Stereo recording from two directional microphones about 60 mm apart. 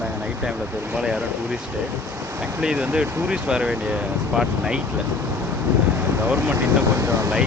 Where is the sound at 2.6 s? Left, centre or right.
Centre.